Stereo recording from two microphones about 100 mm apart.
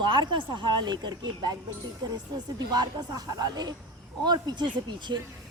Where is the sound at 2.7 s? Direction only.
45° right (ahead or behind).